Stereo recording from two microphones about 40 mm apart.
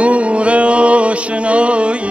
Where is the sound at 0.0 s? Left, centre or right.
Right.